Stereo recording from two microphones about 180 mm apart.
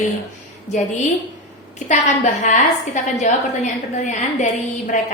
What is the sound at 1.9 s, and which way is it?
A woman's voice, 40° left (ahead or behind).